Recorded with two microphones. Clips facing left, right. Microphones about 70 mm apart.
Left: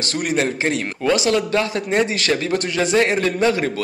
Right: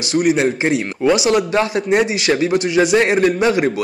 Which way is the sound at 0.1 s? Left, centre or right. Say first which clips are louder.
Right 6 dB; centre.